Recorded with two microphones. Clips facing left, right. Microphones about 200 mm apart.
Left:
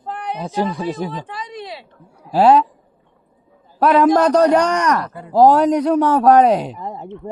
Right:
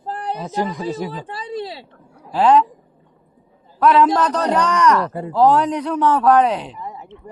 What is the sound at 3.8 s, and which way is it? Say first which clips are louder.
A man's voice: left 2 dB; 40° left (ahead or behind).